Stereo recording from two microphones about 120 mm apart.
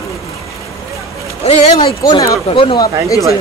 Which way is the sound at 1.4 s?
65° left (ahead or behind).